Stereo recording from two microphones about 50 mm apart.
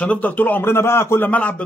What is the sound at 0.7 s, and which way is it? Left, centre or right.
Speech, left.